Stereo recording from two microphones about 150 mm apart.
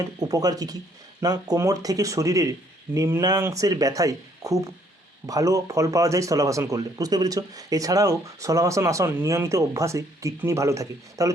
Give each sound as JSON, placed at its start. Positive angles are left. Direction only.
{"t": 0.2, "sound": "speech", "side_deg": -25}